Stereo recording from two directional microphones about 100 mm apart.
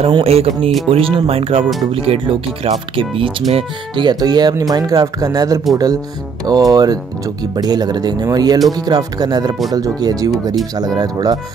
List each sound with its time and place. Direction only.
0.1 s speech: 75° right (ahead or behind)
0.8 s speech: 70° right (ahead or behind); by 11.3 s 40° right (ahead or behind)